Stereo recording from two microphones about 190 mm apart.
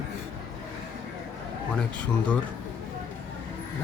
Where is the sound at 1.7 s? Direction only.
5° left (ahead or behind).